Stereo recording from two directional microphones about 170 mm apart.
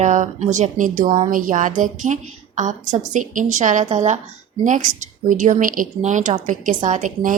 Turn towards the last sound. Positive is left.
turn(degrees=-50)  # may be behind; listen again after turning